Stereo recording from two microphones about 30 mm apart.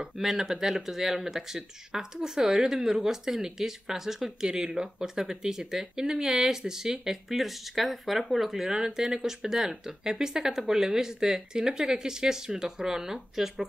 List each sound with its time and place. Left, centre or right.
0.2 s speech: centre